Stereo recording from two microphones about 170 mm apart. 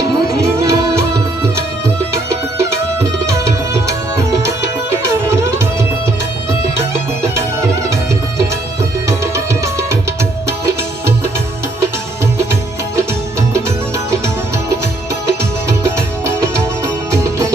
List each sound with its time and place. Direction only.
0.3 s music: 15° right (ahead or behind)
2.3 s tabla: 15° right (ahead or behind)
6.7 s music: 15° right (ahead or behind)
9.0 s music: 15° right (ahead or behind)
15.8 s music: 15° right (ahead or behind)